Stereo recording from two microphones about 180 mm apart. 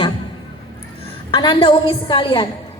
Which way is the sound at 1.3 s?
25° left (ahead or behind).